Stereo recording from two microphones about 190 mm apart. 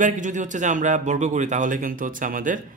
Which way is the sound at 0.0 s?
40° right (ahead or behind).